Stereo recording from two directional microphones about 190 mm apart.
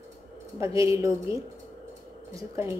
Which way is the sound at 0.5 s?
15° right (ahead or behind).